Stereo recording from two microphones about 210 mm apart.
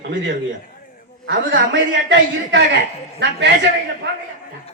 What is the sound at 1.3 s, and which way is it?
A man's voice, 60° right (ahead or behind).